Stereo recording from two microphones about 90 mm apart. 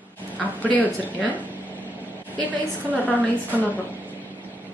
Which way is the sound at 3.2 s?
15° left (ahead or behind).